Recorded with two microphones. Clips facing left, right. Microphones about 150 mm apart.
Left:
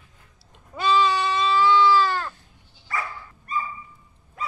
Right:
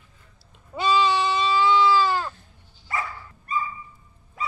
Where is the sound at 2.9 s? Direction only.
25° right (ahead or behind).